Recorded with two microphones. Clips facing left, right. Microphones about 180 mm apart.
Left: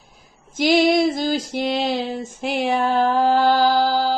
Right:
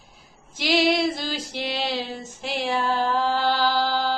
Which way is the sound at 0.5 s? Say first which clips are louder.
Left 5 dB; 50° left (ahead or behind).